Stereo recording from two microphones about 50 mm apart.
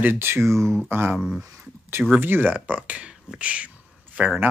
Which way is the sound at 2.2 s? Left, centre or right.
Right.